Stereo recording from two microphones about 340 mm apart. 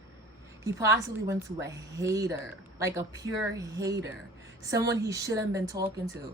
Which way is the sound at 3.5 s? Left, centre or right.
Centre.